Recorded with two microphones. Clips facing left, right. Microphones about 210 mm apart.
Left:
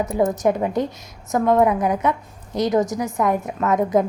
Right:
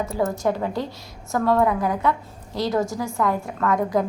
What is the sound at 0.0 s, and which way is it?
A woman's voice, 20° left (ahead or behind).